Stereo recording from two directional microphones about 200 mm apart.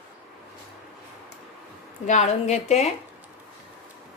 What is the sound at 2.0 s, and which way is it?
Speech, 35° left (ahead or behind).